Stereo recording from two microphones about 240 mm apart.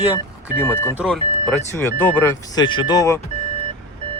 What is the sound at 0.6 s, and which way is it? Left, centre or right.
Speech, centre.